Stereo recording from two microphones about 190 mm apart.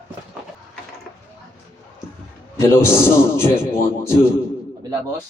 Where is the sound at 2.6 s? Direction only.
15° left (ahead or behind).